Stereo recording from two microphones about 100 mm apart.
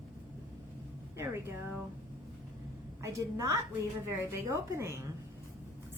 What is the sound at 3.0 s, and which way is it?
A woman's voice, 30° right (ahead or behind).